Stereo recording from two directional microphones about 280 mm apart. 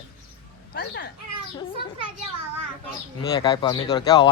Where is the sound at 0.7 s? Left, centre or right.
Left.